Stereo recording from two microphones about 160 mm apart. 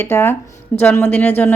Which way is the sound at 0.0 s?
15° left (ahead or behind).